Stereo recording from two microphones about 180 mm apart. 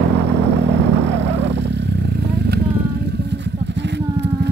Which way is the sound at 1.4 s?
70° right (ahead or behind).